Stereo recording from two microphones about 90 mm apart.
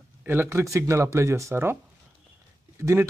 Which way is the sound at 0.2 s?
25° right (ahead or behind).